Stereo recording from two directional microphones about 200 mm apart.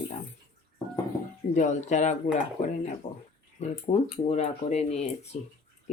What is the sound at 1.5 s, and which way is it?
Speech, 35° left (ahead or behind).